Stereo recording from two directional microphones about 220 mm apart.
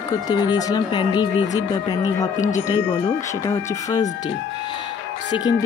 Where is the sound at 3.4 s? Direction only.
15° left (ahead or behind).